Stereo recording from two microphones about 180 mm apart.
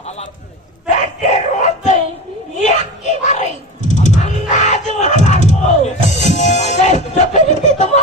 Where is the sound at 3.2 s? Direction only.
40° left (ahead or behind).